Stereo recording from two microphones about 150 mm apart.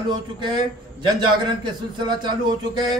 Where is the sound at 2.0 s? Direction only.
30° right (ahead or behind).